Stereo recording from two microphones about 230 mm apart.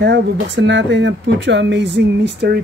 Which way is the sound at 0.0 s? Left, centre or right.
Right.